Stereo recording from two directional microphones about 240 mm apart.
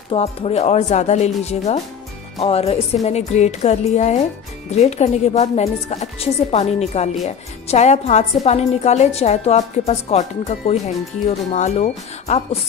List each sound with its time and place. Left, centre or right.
0.1 s a woman's voice: left